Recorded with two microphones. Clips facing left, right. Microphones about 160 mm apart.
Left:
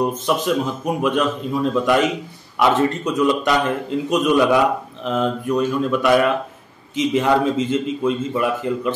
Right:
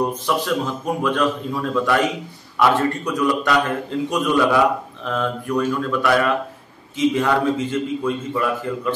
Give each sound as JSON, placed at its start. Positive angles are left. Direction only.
{"t": 0.3, "sound": "a man's voice", "side_deg": 20}